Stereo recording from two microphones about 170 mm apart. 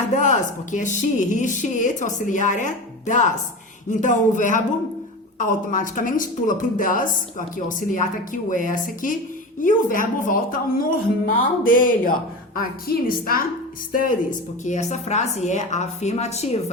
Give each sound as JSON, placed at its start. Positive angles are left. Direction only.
{"t": 0.2, "sound": "a woman's voice", "side_deg": 50}